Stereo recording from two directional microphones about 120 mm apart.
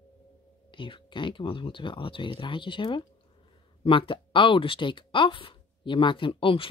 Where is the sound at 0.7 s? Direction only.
45° left (ahead or behind).